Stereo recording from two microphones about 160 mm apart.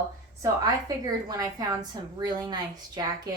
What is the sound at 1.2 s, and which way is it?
Speech, 25° right (ahead or behind).